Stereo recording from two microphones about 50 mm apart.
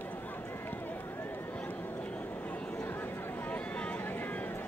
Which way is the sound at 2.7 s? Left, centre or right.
Left.